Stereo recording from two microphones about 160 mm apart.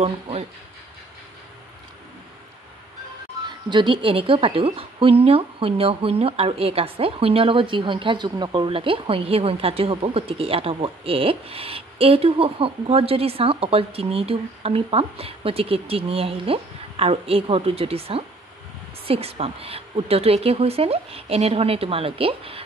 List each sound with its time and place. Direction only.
0.0 s a woman's voice: 40° right (ahead or behind)
3.4 s a woman's voice: 30° right (ahead or behind)